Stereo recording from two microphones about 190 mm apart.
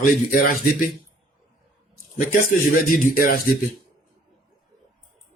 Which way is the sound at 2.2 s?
45° left (ahead or behind).